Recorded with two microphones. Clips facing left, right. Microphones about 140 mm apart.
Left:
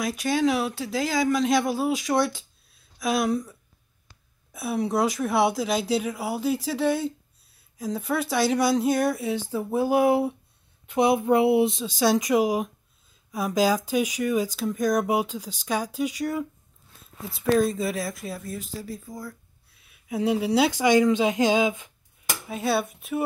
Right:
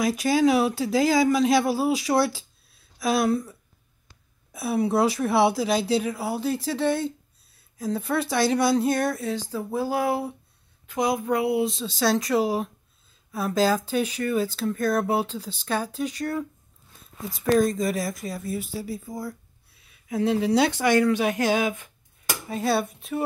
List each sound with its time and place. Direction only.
0.2 s speech: 5° right (ahead or behind); by 10.3 s 20° left (ahead or behind)
10.9 s a sound: 25° left (ahead or behind)
11.8 s speech: 15° left (ahead or behind); by 19.3 s 10° right (ahead or behind)
19.9 s speech: 10° left (ahead or behind)
22.5 s speech: centre (ahead or behind)